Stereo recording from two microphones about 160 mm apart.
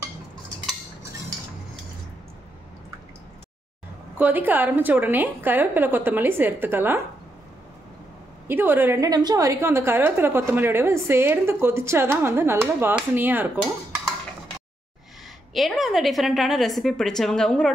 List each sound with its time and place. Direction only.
4.2 s a woman's voice: 10° right (ahead or behind)
8.5 s a woman's voice: 15° right (ahead or behind)
13.6 s dishes: centre (ahead or behind)
15.5 s a woman's voice: centre (ahead or behind)